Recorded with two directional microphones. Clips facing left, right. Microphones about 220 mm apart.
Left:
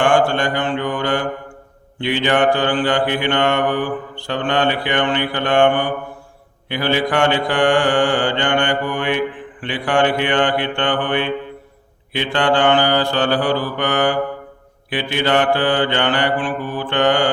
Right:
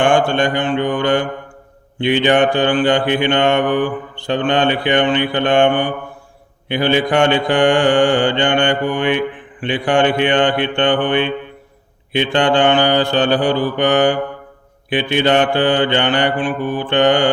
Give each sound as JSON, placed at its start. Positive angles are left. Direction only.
{"t": 0.0, "sound": "mantra", "side_deg": -20}